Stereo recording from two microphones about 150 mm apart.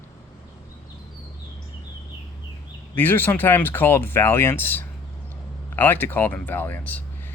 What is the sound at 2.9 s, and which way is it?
Speech, 10° left (ahead or behind).